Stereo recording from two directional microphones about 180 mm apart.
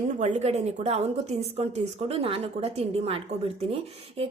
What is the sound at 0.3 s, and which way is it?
A woman's voice, 35° right (ahead or behind).